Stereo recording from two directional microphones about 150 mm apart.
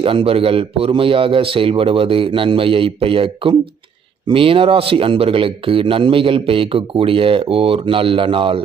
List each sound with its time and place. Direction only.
0.0 s speech: 35° right (ahead or behind)